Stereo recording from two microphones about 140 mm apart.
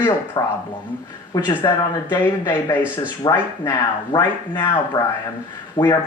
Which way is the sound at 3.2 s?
30° left (ahead or behind).